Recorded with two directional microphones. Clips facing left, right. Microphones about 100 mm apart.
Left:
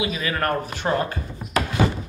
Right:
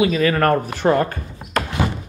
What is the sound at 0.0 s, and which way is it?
Speech, 45° right (ahead or behind).